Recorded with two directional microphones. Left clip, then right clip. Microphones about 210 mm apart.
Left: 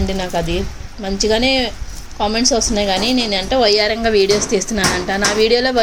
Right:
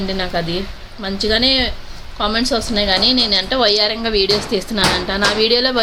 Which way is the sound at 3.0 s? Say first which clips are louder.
Right 3 dB; 30° left (ahead or behind).